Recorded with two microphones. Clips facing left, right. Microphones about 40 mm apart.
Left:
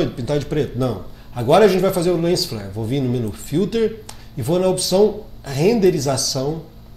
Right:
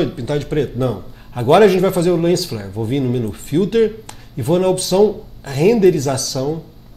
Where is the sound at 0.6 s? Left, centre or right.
Right.